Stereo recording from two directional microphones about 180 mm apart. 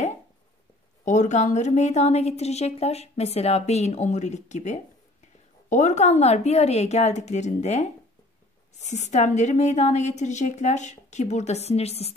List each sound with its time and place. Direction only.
1.0 s a woman's voice: 40° left (ahead or behind)